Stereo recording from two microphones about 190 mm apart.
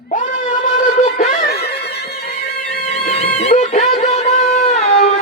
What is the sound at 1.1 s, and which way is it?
Snicker, 45° left (ahead or behind).